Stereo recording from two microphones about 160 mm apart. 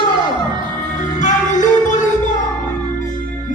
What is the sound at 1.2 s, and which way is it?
Music, 50° left (ahead or behind).